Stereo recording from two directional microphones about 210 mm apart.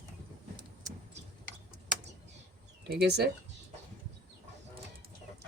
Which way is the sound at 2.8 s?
50° right (ahead or behind).